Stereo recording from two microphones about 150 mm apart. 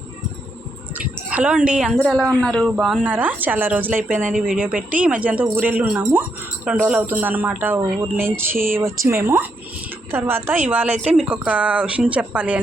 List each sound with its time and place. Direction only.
0.9 s a child's voice: 10° right (ahead or behind)
2.4 s speech: 5° left (ahead or behind)
2.7 s speech: 5° right (ahead or behind)